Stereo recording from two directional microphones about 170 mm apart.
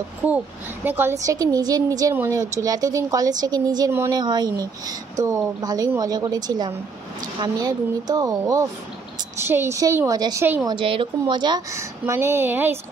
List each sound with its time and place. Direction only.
0.8 s a woman's voice: 15° right (ahead or behind)
10.7 s a woman's voice: 30° right (ahead or behind); by 12.7 s 10° right (ahead or behind)